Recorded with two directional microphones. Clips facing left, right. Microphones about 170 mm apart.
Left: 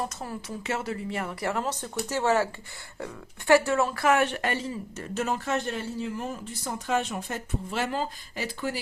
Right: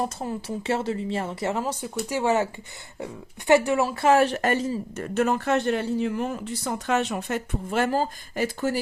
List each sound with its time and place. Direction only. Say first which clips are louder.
0.2 s a woman's voice: right 5 dB; 30° right (ahead or behind)
1.6 s a woman's voice: right 2 dB; 10° right (ahead or behind)
4.0 s speech: right 7 dB; 35° right (ahead or behind); by 7.9 s 60° right (ahead or behind)
7.9 s speech: right 6 dB; 40° right (ahead or behind)